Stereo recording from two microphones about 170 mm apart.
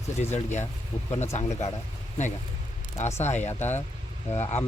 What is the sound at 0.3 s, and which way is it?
Speech, 40° left (ahead or behind).